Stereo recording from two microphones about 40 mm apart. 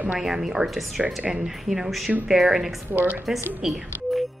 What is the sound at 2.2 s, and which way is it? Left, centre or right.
Speech, centre.